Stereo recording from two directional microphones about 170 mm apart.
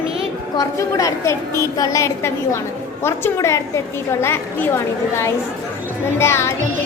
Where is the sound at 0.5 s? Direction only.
20° left (ahead or behind).